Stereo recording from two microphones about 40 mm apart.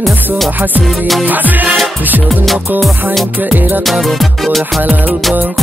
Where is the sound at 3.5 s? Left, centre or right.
Right.